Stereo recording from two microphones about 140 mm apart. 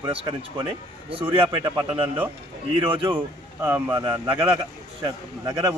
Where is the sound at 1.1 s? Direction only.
40° right (ahead or behind).